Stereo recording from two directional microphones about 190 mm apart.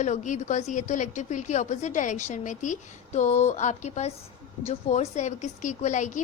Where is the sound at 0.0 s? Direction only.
40° left (ahead or behind).